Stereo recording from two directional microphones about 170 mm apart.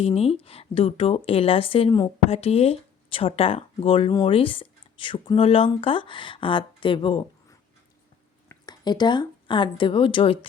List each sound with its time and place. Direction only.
0.0 s speech: 35° left (ahead or behind)
8.4 s a woman's voice: 25° left (ahead or behind)